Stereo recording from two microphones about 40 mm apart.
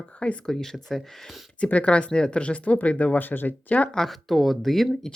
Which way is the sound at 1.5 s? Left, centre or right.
Left.